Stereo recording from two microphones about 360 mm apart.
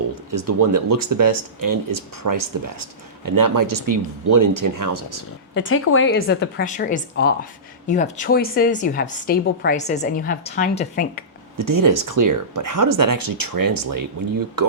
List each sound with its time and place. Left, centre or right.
0.3 s speech: right
5.5 s a woman's voice: left
11.5 s speech: right